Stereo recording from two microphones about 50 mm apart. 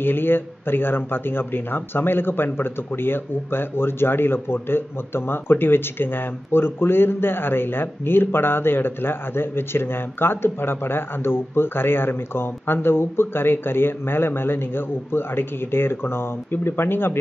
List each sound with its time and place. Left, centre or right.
0.0 s speech: left